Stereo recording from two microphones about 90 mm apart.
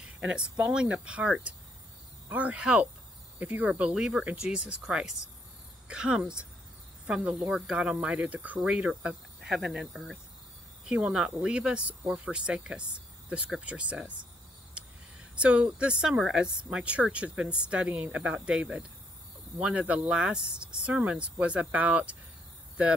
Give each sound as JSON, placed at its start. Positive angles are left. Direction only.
{"t": 0.0, "sound": "speech", "side_deg": -10}
{"t": 7.4, "sound": "speech", "side_deg": -10}
{"t": 10.9, "sound": "speech", "side_deg": -10}
{"t": 15.3, "sound": "speech", "side_deg": -10}